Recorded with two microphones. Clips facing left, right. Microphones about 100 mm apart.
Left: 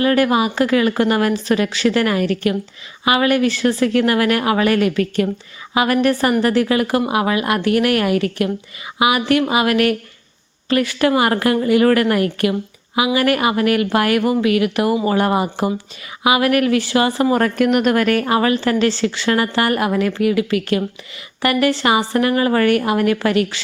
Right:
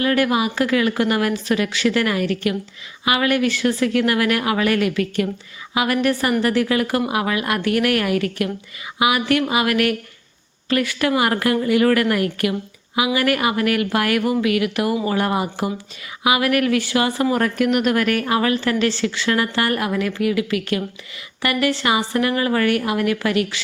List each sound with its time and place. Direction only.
0.0 s a woman's voice: 35° left (ahead or behind)